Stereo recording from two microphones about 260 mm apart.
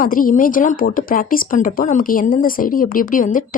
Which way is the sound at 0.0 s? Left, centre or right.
Left.